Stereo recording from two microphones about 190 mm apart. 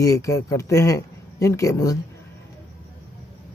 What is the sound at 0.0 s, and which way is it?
Speech, 15° left (ahead or behind).